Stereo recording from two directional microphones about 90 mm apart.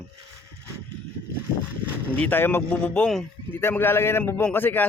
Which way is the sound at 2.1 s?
20° left (ahead or behind).